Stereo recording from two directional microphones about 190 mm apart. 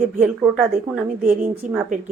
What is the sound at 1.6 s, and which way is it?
Speech, 5° right (ahead or behind).